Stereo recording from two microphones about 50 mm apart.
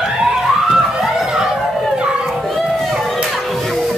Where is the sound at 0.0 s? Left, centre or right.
Centre.